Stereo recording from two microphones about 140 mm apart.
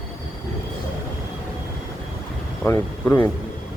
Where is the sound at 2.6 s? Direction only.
10° left (ahead or behind).